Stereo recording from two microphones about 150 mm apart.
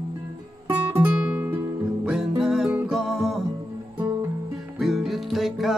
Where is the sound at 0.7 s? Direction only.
10° right (ahead or behind).